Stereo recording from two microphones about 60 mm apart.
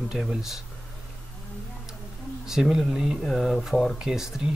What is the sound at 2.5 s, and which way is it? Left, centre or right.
Speech, centre.